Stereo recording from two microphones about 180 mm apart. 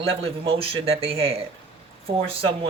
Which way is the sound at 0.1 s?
30° right (ahead or behind).